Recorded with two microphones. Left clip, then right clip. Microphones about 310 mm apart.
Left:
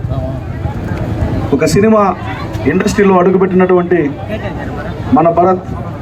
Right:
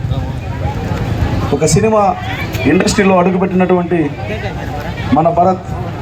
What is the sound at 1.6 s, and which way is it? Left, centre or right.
Speech, right.